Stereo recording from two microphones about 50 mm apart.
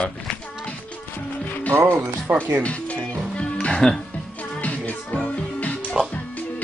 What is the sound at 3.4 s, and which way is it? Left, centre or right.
Music, left.